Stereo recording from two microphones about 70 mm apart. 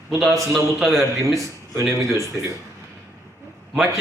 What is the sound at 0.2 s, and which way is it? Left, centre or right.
Speech, centre.